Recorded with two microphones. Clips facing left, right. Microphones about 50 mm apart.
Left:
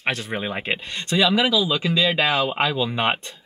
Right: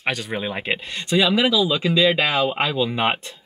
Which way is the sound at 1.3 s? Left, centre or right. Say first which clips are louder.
Right 1 dB; centre.